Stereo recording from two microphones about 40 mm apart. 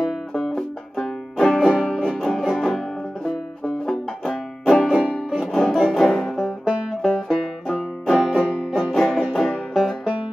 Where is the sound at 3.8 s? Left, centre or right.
Centre.